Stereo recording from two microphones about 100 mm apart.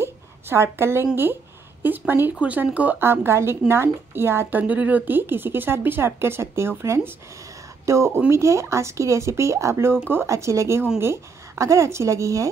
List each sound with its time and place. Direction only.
0.0 s a sound: 25° right (ahead or behind)
1.1 s speech: 20° right (ahead or behind)
7.8 s a woman's voice: 30° right (ahead or behind)